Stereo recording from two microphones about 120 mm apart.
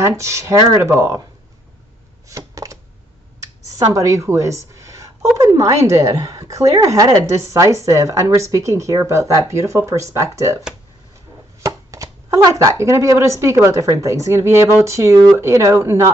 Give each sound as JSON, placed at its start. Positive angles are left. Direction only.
{"t": 0.0, "sound": "speech", "side_deg": -25}
{"t": 2.2, "sound": "typewriter", "side_deg": -25}
{"t": 3.6, "sound": "a woman's voice", "side_deg": -30}
{"t": 11.6, "sound": "speech", "side_deg": -25}